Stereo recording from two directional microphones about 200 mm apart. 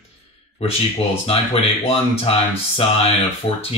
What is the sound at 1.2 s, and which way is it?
Speech, 30° left (ahead or behind).